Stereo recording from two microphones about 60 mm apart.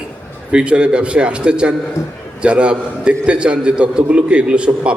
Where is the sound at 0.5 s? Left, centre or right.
Centre.